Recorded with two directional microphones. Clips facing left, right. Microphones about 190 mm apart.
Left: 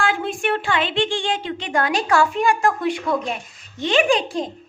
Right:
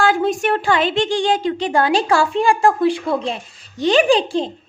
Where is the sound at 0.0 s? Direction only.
40° right (ahead or behind).